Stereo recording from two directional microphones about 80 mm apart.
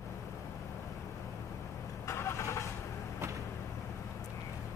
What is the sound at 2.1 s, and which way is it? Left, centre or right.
Vehicle, left.